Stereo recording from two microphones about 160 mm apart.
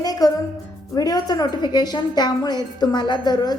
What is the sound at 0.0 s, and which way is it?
Music, 25° left (ahead or behind).